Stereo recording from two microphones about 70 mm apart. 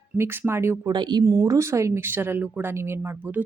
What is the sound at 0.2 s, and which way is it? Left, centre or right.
Speech, right.